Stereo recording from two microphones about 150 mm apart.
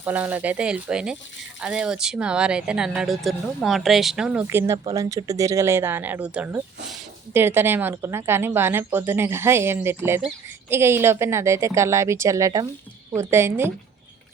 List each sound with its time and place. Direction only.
0.0 s a woman's voice: 10° right (ahead or behind)